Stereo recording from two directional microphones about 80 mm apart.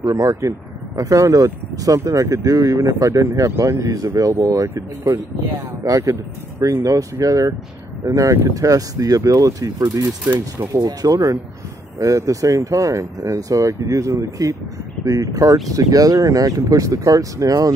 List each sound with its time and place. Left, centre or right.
0.1 s speech: right